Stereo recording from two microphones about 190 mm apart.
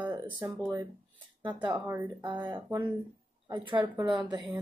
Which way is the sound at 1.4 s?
25° right (ahead or behind).